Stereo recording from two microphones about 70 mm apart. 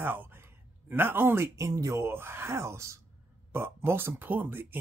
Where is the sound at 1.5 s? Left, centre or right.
Right.